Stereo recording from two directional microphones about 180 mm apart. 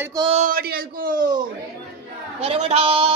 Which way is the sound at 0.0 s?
20° right (ahead or behind).